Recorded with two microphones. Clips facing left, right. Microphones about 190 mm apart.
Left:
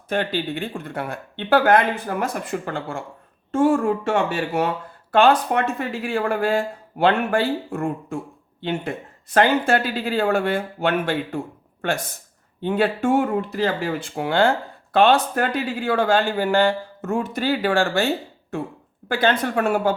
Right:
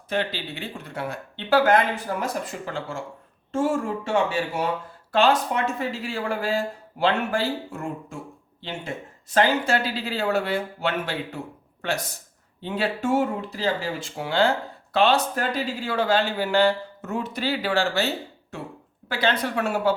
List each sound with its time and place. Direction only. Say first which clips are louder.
0.1 s a man's voice: left 4 dB; 50° left (ahead or behind)
9.3 s a man's voice: left 3 dB; 55° left (ahead or behind)